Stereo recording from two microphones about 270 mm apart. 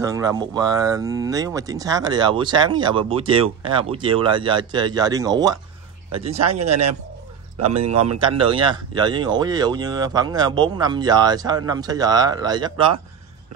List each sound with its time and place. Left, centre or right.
0.0 s speech: centre
6.3 s speech: right
7.7 s speech: right